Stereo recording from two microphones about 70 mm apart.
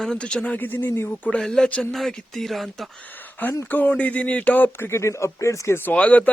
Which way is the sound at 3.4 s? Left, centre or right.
Left.